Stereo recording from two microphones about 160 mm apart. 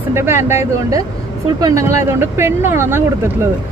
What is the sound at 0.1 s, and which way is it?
Speech, 15° right (ahead or behind).